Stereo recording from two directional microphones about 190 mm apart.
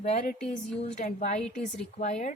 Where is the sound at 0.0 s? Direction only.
35° left (ahead or behind).